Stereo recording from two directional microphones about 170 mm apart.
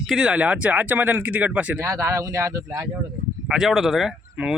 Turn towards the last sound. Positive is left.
turn(degrees=-5)  # may be behind; listen again after turning